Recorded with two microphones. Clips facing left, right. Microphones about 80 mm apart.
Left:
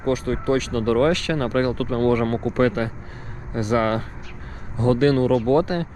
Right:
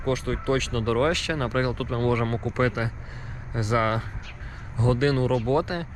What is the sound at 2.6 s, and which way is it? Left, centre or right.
Speech, centre.